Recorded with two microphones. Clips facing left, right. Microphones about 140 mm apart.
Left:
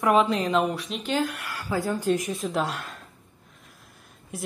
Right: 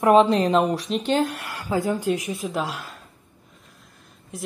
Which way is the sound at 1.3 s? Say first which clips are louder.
Right 3 dB; 25° right (ahead or behind).